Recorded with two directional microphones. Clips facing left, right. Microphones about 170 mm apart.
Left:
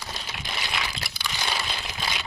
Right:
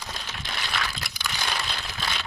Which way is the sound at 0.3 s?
15° left (ahead or behind).